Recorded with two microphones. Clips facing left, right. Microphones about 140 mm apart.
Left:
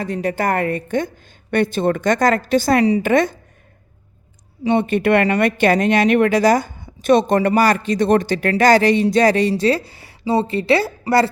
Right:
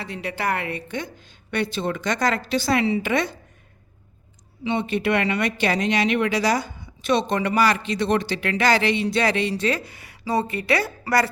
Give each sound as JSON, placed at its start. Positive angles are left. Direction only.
{"t": 0.0, "sound": "speech", "side_deg": 45}
{"t": 4.6, "sound": "speech", "side_deg": 50}